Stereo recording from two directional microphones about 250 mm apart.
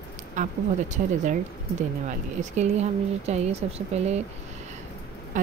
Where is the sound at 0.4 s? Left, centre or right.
Right.